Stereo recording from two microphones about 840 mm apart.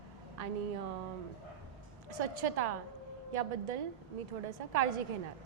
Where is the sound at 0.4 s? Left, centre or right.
Right.